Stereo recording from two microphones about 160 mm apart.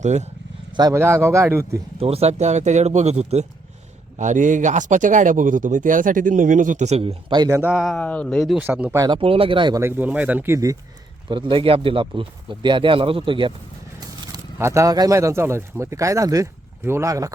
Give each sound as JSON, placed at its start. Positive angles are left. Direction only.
{"t": 0.0, "sound": "speech", "side_deg": -45}
{"t": 0.7, "sound": "speech", "side_deg": -25}
{"t": 2.0, "sound": "speech", "side_deg": -40}
{"t": 7.6, "sound": "speech", "side_deg": -5}
{"t": 8.5, "sound": "speech", "side_deg": -10}
{"t": 9.0, "sound": "speech", "side_deg": -30}
{"t": 9.8, "sound": "speech", "side_deg": -10}
{"t": 11.3, "sound": "speech", "side_deg": -30}
{"t": 14.0, "sound": "speech", "side_deg": -20}